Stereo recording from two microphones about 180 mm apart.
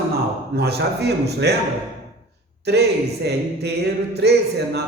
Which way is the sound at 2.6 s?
65° right (ahead or behind).